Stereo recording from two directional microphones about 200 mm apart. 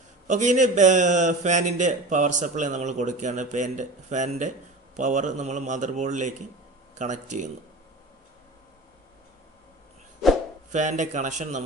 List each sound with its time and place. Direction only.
0.3 s a man's voice: 35° right (ahead or behind)
10.7 s a man's voice: 35° right (ahead or behind)